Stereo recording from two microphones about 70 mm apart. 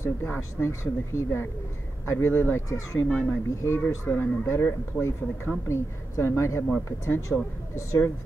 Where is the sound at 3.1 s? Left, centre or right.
Centre.